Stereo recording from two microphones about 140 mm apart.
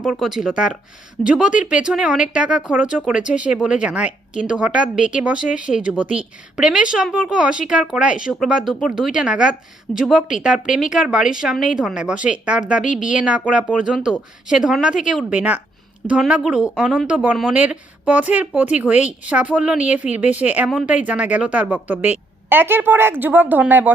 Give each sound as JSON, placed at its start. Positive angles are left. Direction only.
{"t": 0.0, "sound": "a woman's voice", "side_deg": -5}
{"t": 12.8, "sound": "a woman's voice", "side_deg": 65}
{"t": 13.1, "sound": "a woman's voice", "side_deg": -10}